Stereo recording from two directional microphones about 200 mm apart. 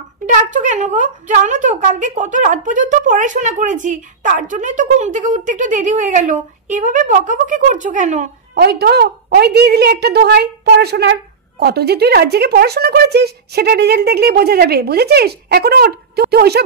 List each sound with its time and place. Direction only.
0.4 s speech: 40° right (ahead or behind)
8.5 s a woman's voice: 55° right (ahead or behind)